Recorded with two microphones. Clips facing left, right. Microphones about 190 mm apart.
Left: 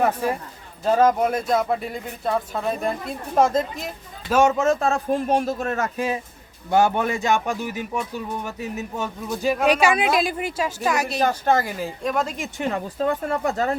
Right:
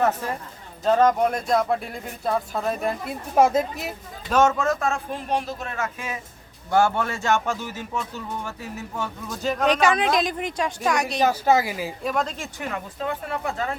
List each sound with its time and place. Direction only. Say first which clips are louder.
0.0 s a man's voice: left 2 dB; 10° left (ahead or behind); by 3.9 s 10° right (ahead or behind)
4.3 s a man's voice: left 1 dB; 10° left (ahead or behind)
4.5 s speech: left 4 dB; 25° left (ahead or behind)
6.7 s a man's voice: left 2 dB; 20° left (ahead or behind); by 11.3 s 5° left (ahead or behind)
11.3 s speech: right 1 dB; 10° right (ahead or behind)
12.1 s a man's voice: left 1 dB; 10° left (ahead or behind)
12.5 s speech: left 6 dB; 30° left (ahead or behind)
13.0 s speech: left 6 dB; 45° left (ahead or behind)